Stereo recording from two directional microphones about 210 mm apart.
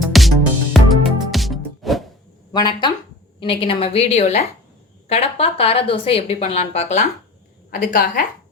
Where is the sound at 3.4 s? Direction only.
25° left (ahead or behind).